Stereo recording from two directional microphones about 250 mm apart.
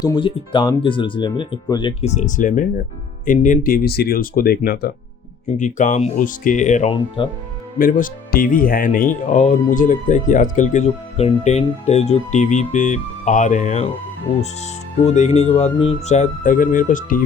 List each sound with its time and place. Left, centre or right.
0.0 s speech: centre
7.8 s speech: left